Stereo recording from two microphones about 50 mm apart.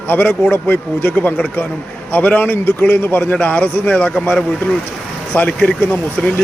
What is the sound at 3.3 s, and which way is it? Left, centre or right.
Speech, left.